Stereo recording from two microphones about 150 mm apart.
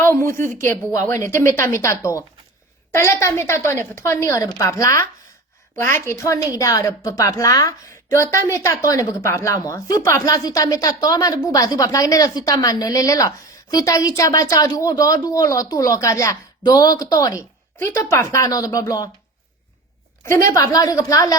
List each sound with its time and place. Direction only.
0.0 s a woman's voice: 15° left (ahead or behind)
20.5 s a woman's voice: 25° left (ahead or behind)